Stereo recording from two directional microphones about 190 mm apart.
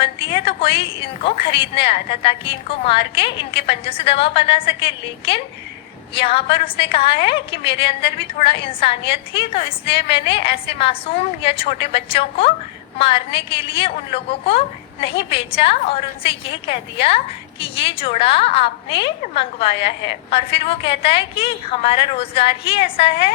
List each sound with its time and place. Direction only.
0.0 s a woman's voice: 30° left (ahead or behind)